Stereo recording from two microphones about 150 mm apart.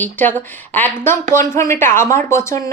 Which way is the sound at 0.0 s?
15° left (ahead or behind).